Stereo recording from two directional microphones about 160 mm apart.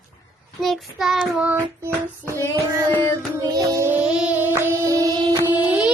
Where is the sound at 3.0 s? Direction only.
25° right (ahead or behind).